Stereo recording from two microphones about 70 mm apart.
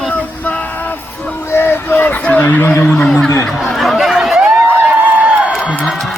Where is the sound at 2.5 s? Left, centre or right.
Left.